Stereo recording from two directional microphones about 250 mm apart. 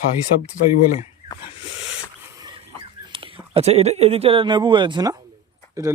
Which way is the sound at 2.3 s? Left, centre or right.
Centre.